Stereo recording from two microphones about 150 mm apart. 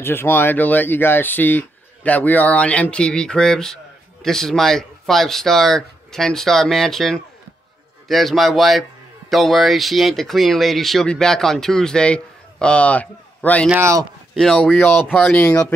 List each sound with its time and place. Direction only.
0.0 s speech: 15° left (ahead or behind)
13.7 s speech: 20° right (ahead or behind)
14.3 s speech: centre (ahead or behind)